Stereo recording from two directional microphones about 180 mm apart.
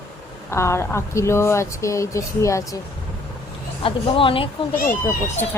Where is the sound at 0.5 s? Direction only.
15° left (ahead or behind).